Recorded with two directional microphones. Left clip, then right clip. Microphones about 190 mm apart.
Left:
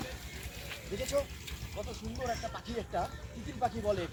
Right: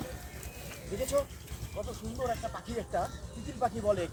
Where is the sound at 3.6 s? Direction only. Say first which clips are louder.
Right 3 dB; 5° right (ahead or behind).